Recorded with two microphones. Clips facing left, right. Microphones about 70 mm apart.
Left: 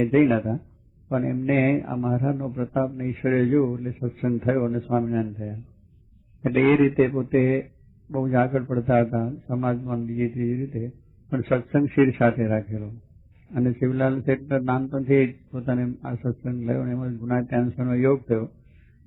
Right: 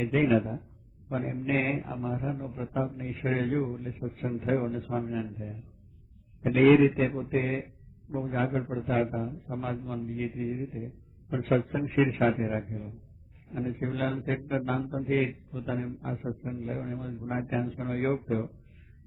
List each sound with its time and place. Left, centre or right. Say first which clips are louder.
0.1 s a man's voice: left 6 dB; left
17.7 s a man's voice: left 10 dB; left